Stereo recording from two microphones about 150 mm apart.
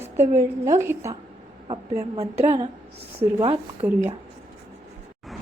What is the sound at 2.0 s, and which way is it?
A woman's voice, 40° right (ahead or behind).